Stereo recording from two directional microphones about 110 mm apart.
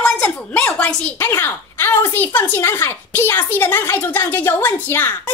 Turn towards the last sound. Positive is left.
turn(degrees=20)  # may be behind; listen again after turning